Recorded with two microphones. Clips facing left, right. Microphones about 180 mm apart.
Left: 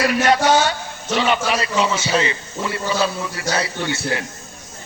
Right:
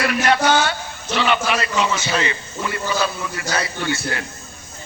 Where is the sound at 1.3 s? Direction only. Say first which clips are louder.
Left 1 dB; 35° left (ahead or behind).